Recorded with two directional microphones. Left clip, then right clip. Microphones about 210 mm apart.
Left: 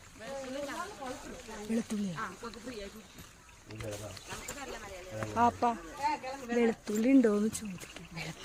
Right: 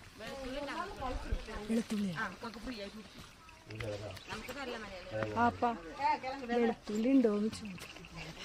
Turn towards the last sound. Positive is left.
turn(degrees=30)  # may be behind; listen again after turning